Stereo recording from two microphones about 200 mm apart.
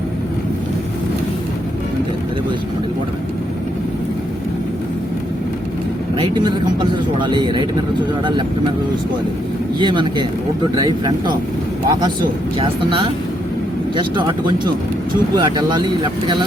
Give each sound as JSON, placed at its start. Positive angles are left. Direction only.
{"t": 7.2, "sound": "speech", "side_deg": -25}
{"t": 9.7, "sound": "speech", "side_deg": -25}